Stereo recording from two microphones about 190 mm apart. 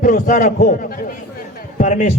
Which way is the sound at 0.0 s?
45° left (ahead or behind).